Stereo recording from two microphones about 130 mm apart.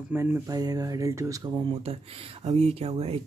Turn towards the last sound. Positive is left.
turn(degrees=-50)  # may be behind; listen again after turning